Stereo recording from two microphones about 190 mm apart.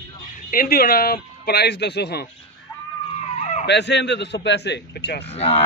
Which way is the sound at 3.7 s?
65° left (ahead or behind).